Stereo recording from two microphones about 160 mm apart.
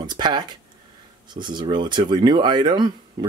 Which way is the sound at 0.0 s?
25° right (ahead or behind).